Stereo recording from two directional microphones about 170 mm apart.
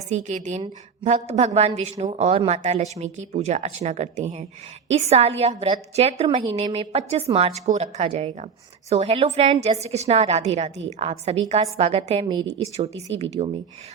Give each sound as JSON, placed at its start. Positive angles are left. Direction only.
{"t": 0.1, "sound": "a woman's voice", "side_deg": -45}